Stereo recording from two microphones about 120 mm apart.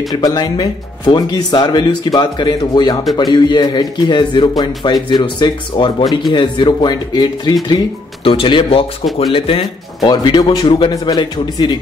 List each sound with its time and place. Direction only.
0.1 s speech: 35° left (ahead or behind)
10.0 s speech: 40° left (ahead or behind)